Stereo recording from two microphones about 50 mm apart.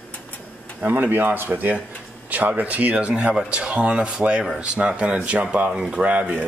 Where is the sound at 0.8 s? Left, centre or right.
Right.